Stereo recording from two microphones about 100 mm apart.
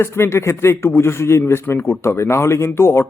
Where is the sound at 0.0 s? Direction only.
25° left (ahead or behind).